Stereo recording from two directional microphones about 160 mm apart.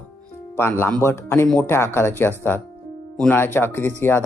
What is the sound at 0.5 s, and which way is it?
Speech, 15° left (ahead or behind).